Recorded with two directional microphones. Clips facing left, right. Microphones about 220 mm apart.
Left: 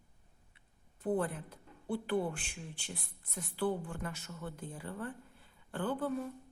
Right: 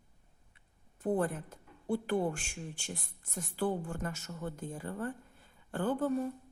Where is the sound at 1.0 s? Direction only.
45° right (ahead or behind).